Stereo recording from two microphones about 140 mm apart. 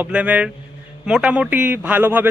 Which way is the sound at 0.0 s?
10° right (ahead or behind).